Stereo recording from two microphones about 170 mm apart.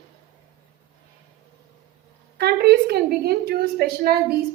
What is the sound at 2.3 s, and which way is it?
A woman's voice, 70° right (ahead or behind).